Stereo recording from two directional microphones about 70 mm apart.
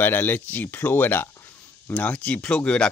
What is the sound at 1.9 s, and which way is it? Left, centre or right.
Speech, centre.